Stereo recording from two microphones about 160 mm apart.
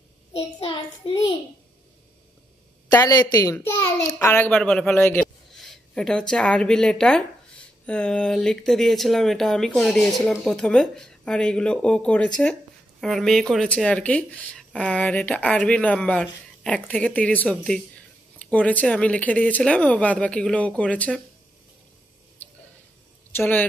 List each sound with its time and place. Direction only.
0.3 s a child's voice: 35° left (ahead or behind)
2.9 s a woman's voice: 25° left (ahead or behind); by 21.2 s 5° left (ahead or behind)
23.3 s speech: 10° left (ahead or behind)